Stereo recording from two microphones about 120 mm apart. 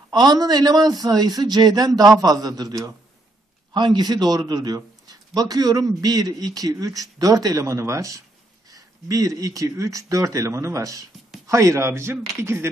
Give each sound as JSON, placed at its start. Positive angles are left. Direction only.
{"t": 0.1, "sound": "speech", "side_deg": -35}